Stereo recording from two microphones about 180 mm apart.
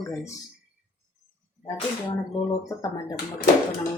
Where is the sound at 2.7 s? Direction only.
20° left (ahead or behind).